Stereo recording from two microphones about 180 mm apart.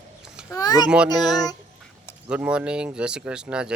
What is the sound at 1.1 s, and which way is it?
Child singing, 20° left (ahead or behind).